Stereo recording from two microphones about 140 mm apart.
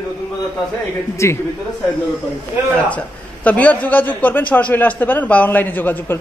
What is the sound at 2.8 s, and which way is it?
A man's voice, 10° left (ahead or behind).